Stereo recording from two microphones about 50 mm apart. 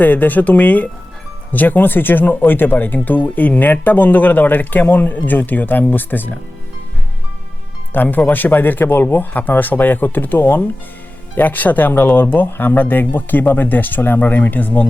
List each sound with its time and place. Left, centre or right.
0.0 s speech: left
7.9 s speech: left